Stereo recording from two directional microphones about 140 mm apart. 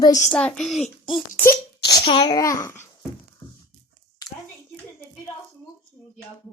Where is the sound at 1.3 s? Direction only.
20° left (ahead or behind).